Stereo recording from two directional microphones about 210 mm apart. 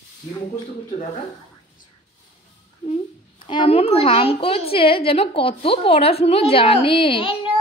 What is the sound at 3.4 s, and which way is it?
A woman's voice, 25° left (ahead or behind).